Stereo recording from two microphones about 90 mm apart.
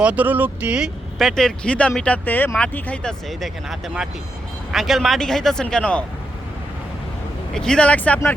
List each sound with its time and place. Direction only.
0.0 s speech: 15° right (ahead or behind)
1.2 s a man's voice: 5° left (ahead or behind)
7.5 s speech: 10° left (ahead or behind)